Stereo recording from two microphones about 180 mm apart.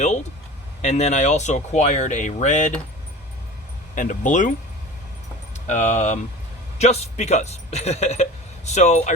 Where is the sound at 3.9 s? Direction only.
45° left (ahead or behind).